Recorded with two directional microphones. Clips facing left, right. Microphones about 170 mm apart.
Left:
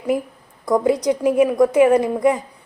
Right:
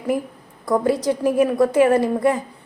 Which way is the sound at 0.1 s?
20° left (ahead or behind).